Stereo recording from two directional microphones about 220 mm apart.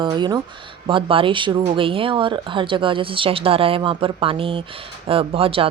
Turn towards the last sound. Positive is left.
turn(degrees=-25)  # may be behind; listen again after turning